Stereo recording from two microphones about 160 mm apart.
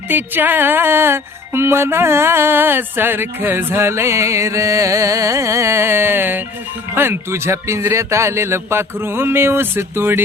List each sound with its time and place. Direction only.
0.1 s music: 10° right (ahead or behind)